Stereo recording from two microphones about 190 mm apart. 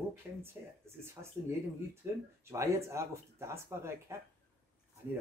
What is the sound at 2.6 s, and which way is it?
Speech, 15° right (ahead or behind).